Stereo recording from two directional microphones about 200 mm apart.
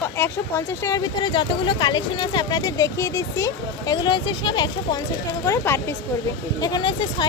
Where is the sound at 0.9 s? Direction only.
20° left (ahead or behind).